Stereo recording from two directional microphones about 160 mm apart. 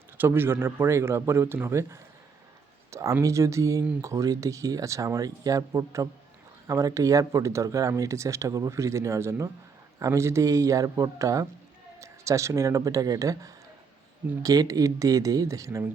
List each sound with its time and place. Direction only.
0.2 s speech: 15° right (ahead or behind)